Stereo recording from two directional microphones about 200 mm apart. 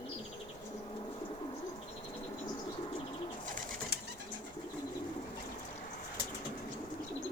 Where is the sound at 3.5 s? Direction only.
40° right (ahead or behind).